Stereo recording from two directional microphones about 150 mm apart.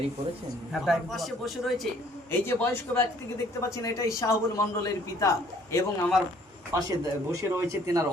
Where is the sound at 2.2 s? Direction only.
15° left (ahead or behind).